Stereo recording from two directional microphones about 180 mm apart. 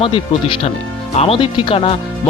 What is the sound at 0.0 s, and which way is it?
Speech, 30° left (ahead or behind).